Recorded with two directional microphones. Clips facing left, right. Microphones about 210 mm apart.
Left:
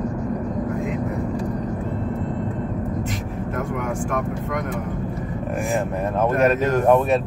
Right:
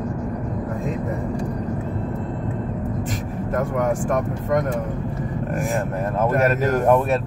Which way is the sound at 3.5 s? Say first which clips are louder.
Right 5 dB; 40° right (ahead or behind).